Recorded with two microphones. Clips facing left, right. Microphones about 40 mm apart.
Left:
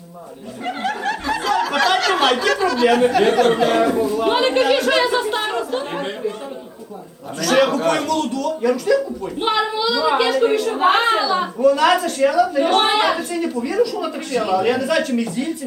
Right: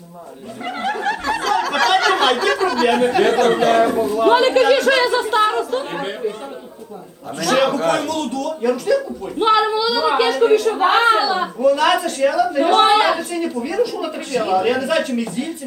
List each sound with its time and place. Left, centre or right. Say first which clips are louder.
0.6 s a sound: right 1 dB; centre
1.7 s chatter: right 3 dB; centre
2.8 s a woman's voice: left 1 dB; centre
4.3 s a woman's voice: right 4 dB; centre
7.3 s a woman's voice: even; centre